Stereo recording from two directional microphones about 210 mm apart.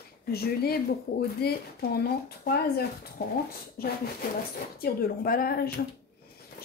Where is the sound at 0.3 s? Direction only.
45° left (ahead or behind).